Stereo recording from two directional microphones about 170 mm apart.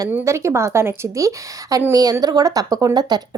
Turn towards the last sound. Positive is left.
turn(degrees=-25)  # may be behind; listen again after turning